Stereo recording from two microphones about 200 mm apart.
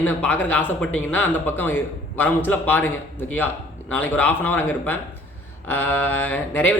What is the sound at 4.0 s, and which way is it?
A man's voice, 10° left (ahead or behind).